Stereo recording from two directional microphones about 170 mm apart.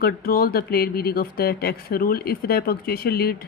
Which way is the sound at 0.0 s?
60° left (ahead or behind).